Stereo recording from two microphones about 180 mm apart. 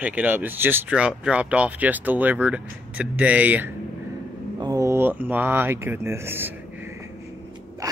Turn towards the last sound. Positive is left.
turn(degrees=-15)  # may be behind; listen again after turning